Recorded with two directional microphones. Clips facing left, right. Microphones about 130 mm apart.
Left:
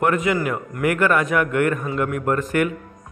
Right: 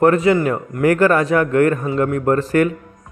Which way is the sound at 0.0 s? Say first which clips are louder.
Right 6 dB; 35° right (ahead or behind).